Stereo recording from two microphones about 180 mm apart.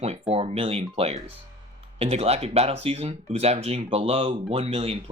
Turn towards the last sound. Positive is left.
turn(degrees=-35)  # may be behind; listen again after turning